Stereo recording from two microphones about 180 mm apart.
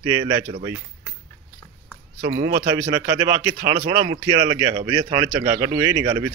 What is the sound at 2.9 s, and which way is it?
Speech, 15° right (ahead or behind).